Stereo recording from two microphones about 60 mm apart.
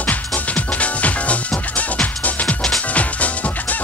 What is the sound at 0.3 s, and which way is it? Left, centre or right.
Music, left.